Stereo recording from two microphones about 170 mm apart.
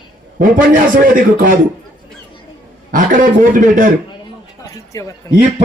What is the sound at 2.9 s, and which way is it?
A man's voice, 50° right (ahead or behind).